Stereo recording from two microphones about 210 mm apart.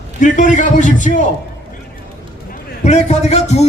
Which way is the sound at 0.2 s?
35° left (ahead or behind).